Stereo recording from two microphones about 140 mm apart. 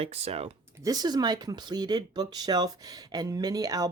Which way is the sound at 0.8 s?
30° right (ahead or behind).